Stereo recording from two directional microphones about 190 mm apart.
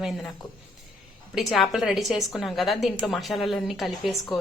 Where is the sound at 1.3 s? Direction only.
Centre (ahead or behind).